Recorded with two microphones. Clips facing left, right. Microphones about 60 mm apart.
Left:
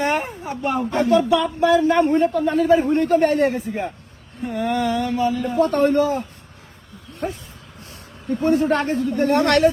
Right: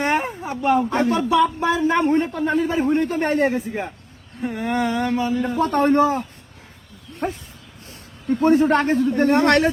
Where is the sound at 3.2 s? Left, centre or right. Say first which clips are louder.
Left 2 dB; right.